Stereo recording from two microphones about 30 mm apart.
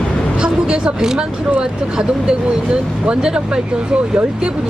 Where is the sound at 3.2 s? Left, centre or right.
Right.